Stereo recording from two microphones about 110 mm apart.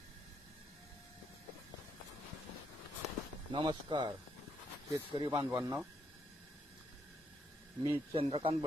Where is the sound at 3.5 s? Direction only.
45° right (ahead or behind).